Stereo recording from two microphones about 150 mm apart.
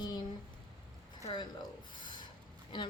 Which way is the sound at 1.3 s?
30° left (ahead or behind).